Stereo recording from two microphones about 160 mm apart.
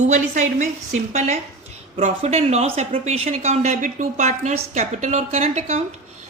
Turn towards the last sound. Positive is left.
turn(degrees=-45)  # may be behind; listen again after turning